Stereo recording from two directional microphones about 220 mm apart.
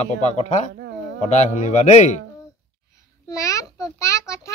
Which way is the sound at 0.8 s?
55° right (ahead or behind).